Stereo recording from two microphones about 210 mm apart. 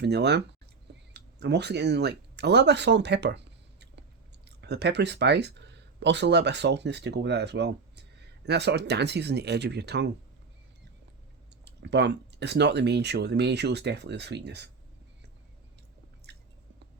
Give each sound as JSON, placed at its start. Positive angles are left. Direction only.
{"t": 0.0, "sound": "speech", "side_deg": -55}
{"t": 11.6, "sound": "speech", "side_deg": -55}